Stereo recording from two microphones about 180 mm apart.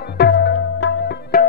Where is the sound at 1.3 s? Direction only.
55° left (ahead or behind).